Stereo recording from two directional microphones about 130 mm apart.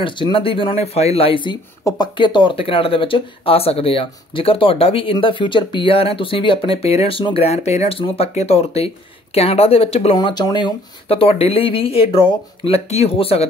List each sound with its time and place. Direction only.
0.0 s speech: 40° left (ahead or behind)
10.1 s speech: 35° left (ahead or behind); by 13.5 s 50° left (ahead or behind)